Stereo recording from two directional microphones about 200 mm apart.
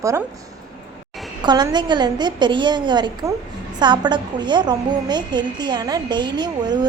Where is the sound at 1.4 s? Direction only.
20° right (ahead or behind).